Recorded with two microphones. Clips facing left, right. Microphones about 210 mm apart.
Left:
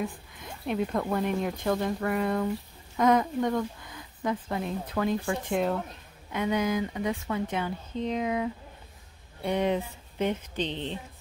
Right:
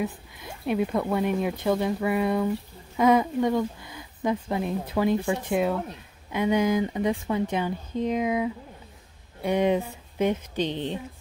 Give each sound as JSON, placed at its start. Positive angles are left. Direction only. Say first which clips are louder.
{"t": 0.7, "sound": "speech", "louder": "right 3 dB", "side_deg": -5}
{"t": 6.3, "sound": "speech", "louder": "right 4 dB", "side_deg": -15}